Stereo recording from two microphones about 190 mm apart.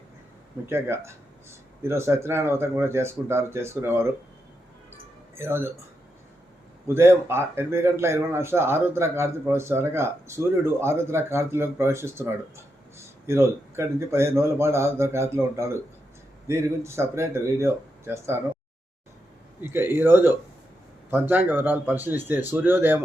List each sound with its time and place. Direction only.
0.7 s a man's voice: 15° right (ahead or behind)
5.4 s a man's voice: 10° right (ahead or behind)
6.8 s a man's voice: 15° right (ahead or behind)
19.6 s a man's voice: 10° right (ahead or behind)